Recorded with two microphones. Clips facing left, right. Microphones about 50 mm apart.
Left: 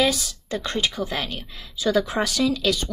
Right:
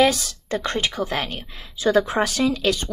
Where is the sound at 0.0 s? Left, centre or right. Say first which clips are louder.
Right 4 dB; right.